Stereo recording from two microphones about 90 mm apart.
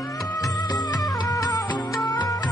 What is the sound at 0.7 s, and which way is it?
Music, 45° left (ahead or behind).